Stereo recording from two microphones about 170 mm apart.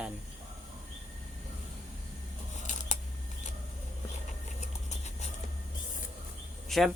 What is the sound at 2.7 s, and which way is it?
Scissors, 50° left (ahead or behind).